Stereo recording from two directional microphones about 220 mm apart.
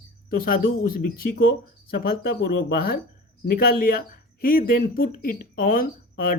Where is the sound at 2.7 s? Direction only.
45° left (ahead or behind).